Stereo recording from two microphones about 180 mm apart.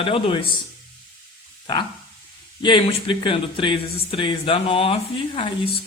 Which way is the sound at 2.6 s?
25° left (ahead or behind).